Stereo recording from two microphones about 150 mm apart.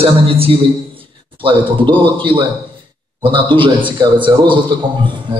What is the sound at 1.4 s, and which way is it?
A man's voice, 35° right (ahead or behind).